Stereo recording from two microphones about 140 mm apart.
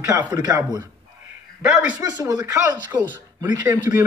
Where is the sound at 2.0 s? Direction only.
25° right (ahead or behind).